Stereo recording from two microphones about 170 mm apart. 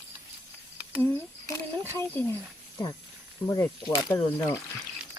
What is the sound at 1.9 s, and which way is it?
Speech, 15° left (ahead or behind).